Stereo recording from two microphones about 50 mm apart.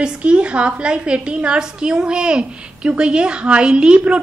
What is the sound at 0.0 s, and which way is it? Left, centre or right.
A woman's voice, right.